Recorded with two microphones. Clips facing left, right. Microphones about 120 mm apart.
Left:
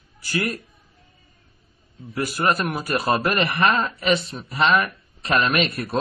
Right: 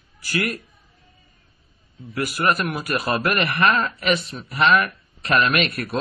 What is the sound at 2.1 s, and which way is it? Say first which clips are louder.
A man's voice: even; 30° left (ahead or behind).